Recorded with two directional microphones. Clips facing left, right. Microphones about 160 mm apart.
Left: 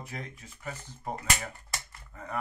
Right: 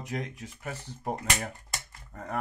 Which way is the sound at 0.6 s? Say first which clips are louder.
Right 2 dB; 60° right (ahead or behind).